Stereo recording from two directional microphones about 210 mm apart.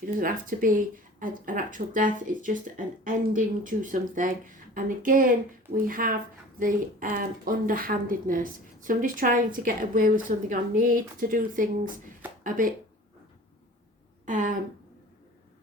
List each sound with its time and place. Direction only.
0.0 s speech: 40° right (ahead or behind)
14.3 s speech: 40° right (ahead or behind)